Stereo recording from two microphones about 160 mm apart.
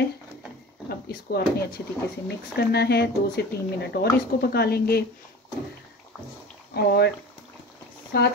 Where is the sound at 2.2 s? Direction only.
90° left.